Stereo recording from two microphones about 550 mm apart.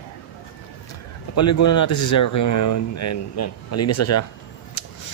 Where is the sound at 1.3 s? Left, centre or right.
Left.